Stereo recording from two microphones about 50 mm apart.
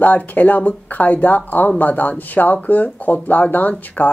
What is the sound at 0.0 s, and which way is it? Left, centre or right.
Speech, left.